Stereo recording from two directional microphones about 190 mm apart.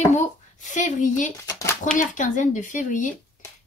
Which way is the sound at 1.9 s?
40° left (ahead or behind).